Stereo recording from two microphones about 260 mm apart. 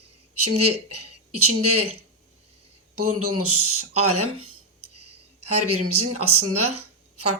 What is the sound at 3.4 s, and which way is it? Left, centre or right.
Speech, right.